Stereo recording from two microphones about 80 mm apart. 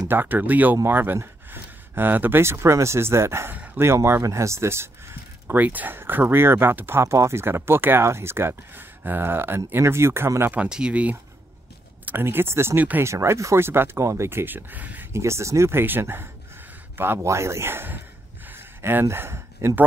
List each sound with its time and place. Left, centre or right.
0.1 s speech: right
5.5 s speech: right
10.5 s speech: centre
12.1 s speech: right
15.1 s speech: right
18.5 s a sound: right